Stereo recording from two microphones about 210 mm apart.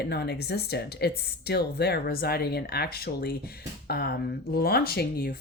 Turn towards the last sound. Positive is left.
turn(degrees=45)  # may be behind; listen again after turning